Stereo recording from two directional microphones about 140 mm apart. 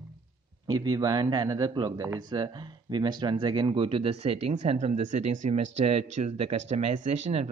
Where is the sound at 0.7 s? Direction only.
25° right (ahead or behind).